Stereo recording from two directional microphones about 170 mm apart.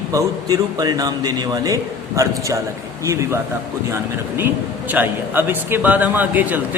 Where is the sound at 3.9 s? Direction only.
10° right (ahead or behind).